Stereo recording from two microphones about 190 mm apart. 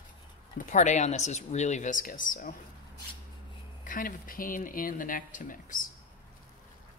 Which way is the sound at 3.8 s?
45° left (ahead or behind).